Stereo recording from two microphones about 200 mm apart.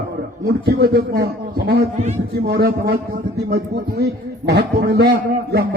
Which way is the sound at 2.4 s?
55° right (ahead or behind).